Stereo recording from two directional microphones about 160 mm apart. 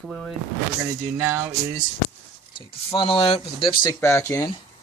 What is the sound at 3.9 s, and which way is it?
Speech, 15° left (ahead or behind).